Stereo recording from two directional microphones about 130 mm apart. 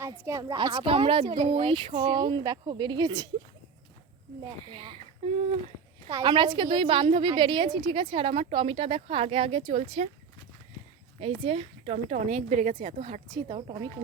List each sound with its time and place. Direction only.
0.3 s a woman's voice: 25° right (ahead or behind)
0.5 s a woman's voice: 35° right (ahead or behind)
1.2 s a woman's voice: 60° right (ahead or behind); by 2.1 s 45° right (ahead or behind)
2.1 s speech: 35° right (ahead or behind)
4.6 s a woman's voice: 40° right (ahead or behind)
6.2 s a woman's voice: 35° right (ahead or behind); by 10.1 s 50° right (ahead or behind)
11.4 s speech: 50° right (ahead or behind)
12.1 s a woman's voice: 70° right (ahead or behind)
12.8 s speech: 55° right (ahead or behind)
13.3 s a woman's voice: 45° right (ahead or behind)